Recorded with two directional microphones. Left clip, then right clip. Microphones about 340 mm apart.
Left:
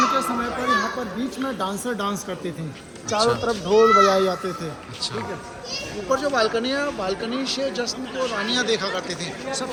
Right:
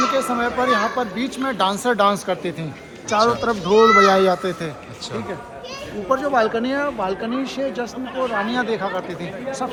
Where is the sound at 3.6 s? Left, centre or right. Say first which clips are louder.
Right 3 dB; right.